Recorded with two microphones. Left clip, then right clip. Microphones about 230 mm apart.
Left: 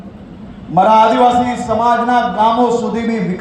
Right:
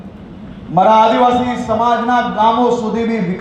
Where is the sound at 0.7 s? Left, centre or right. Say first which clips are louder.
Even; left.